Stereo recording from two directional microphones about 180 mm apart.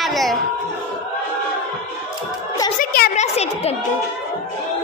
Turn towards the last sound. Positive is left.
turn(degrees=35)  # may be behind; listen again after turning